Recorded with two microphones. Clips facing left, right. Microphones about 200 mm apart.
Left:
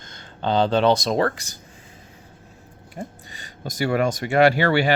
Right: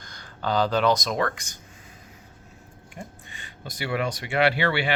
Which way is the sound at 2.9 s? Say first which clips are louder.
Left 6 dB; 40° left (ahead or behind).